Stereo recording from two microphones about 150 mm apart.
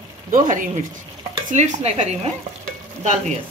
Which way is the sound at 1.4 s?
55° right (ahead or behind).